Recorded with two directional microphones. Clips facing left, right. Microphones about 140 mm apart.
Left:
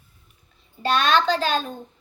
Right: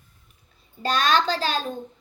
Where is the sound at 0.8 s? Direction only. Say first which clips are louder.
Left 2 dB; 35° right (ahead or behind).